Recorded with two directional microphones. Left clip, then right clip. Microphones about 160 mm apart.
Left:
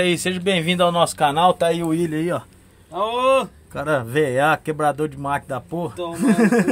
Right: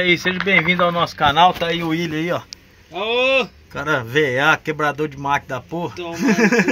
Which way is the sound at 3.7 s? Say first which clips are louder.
Right 1 dB; 15° right (ahead or behind).